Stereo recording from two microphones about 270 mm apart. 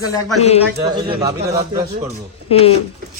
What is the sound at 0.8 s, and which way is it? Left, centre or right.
Speech, centre.